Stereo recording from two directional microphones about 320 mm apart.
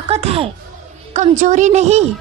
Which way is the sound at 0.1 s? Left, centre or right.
Centre.